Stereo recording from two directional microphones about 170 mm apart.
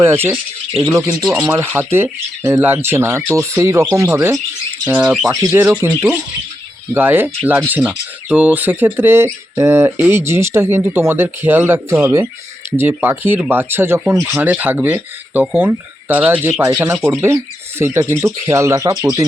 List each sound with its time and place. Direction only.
0.0 s speech: 15° right (ahead or behind)